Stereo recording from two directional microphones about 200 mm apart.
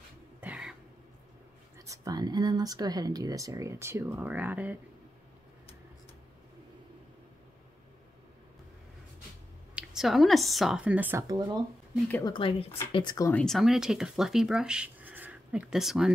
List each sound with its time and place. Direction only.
0.4 s cough: 5° right (ahead or behind)
1.9 s speech: 20° right (ahead or behind)
9.8 s a woman's voice: centre (ahead or behind)
11.2 s speech: 20° right (ahead or behind)
12.3 s speech: 25° left (ahead or behind)
13.3 s speech: 5° left (ahead or behind)